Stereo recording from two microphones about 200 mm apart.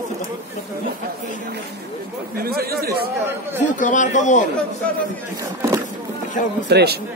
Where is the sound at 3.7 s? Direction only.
40° left (ahead or behind).